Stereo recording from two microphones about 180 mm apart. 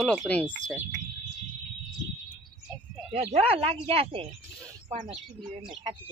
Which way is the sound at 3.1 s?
35° right (ahead or behind).